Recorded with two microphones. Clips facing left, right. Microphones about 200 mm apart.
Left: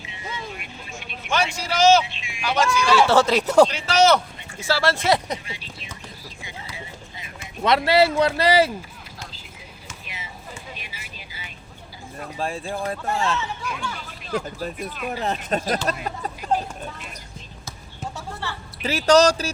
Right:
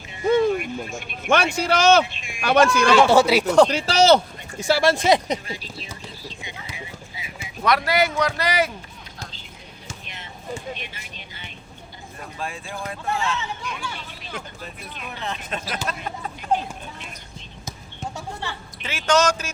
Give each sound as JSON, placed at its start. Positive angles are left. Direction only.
{"t": 0.0, "sound": "speech", "side_deg": -50}
{"t": 3.1, "sound": "speech", "side_deg": -10}
{"t": 3.7, "sound": "speech", "side_deg": -35}
{"t": 4.6, "sound": "speech", "side_deg": -15}
{"t": 5.5, "sound": "speech", "side_deg": -40}
{"t": 6.2, "sound": "a sound", "side_deg": -20}
{"t": 7.6, "sound": "speech", "side_deg": 25}
{"t": 10.1, "sound": "a sound", "side_deg": 5}
{"t": 10.8, "sound": "speech", "side_deg": 5}
{"t": 12.4, "sound": "speech", "side_deg": 35}
{"t": 14.3, "sound": "speech", "side_deg": 40}
{"t": 18.4, "sound": "a sound", "side_deg": -15}
{"t": 18.8, "sound": "speech", "side_deg": 35}